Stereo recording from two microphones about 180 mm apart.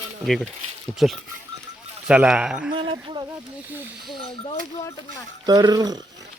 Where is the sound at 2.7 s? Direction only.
30° right (ahead or behind).